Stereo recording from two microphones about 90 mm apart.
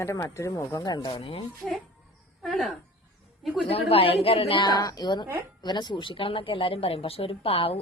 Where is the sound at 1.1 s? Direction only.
90° left.